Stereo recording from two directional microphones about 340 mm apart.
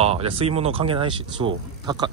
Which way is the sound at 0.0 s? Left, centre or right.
Centre.